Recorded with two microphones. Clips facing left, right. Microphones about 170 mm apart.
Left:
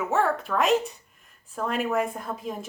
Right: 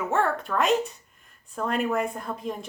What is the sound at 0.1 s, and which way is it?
Speech, centre (ahead or behind).